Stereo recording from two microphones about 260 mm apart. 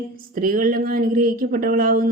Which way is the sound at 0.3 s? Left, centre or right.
Right.